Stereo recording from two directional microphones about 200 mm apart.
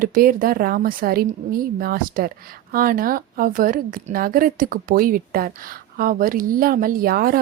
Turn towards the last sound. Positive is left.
turn(degrees=-50)  # may be behind; listen again after turning